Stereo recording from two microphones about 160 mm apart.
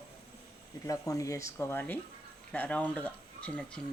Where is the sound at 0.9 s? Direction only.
20° left (ahead or behind).